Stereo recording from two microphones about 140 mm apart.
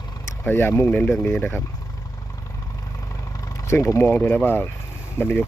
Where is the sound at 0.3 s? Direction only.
15° left (ahead or behind).